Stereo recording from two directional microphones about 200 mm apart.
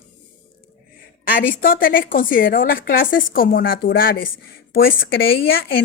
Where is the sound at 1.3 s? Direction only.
45° left (ahead or behind).